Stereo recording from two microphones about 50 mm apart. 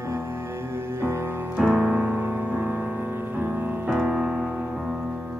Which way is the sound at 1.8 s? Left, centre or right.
Right.